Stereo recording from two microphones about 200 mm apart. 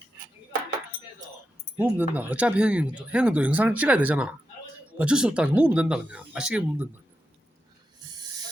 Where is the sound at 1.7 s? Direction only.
10° right (ahead or behind).